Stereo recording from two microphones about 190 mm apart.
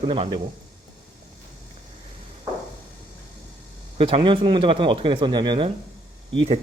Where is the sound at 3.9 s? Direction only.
30° right (ahead or behind).